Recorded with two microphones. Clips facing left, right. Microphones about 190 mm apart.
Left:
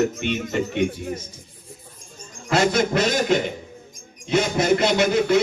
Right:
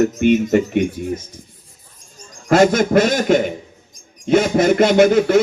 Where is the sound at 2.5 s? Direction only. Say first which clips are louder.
Right 7 dB; 50° right (ahead or behind).